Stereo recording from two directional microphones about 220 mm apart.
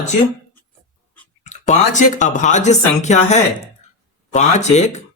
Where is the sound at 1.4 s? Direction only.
30° left (ahead or behind).